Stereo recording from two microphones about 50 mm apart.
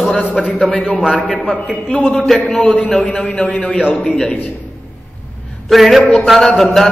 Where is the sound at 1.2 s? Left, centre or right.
Left.